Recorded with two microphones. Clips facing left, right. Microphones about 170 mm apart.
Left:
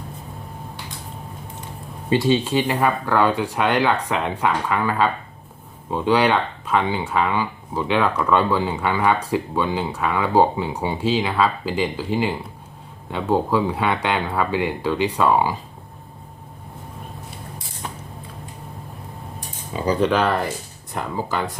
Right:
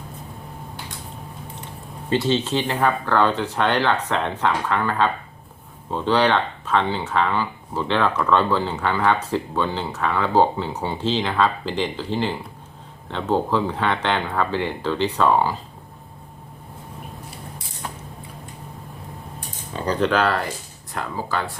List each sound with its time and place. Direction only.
2.0 s speech: 10° left (ahead or behind)
19.7 s speech: 10° left (ahead or behind)